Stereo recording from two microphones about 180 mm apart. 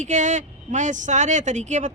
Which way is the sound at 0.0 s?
40° right (ahead or behind).